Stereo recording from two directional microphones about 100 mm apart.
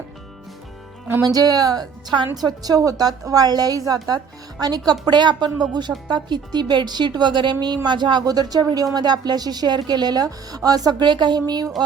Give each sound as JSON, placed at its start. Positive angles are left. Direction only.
{"t": 1.2, "sound": "a woman's voice", "side_deg": -40}